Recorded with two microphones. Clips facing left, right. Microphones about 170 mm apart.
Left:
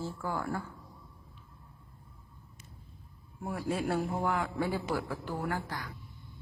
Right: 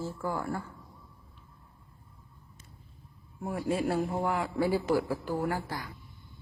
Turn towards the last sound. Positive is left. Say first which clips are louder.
# right 4 dB
turn(degrees=-10)  # may be behind; listen again after turning